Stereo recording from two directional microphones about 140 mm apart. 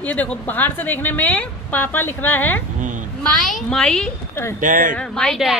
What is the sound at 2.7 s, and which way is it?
Speech, 65° right (ahead or behind).